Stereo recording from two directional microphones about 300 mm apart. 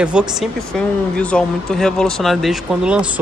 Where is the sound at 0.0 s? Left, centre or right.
Centre.